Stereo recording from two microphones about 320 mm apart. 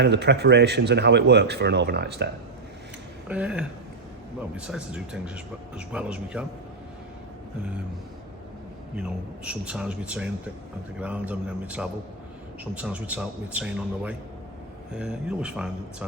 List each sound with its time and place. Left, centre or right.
0.0 s speech: right
3.2 s speech: centre
9.0 s speech: centre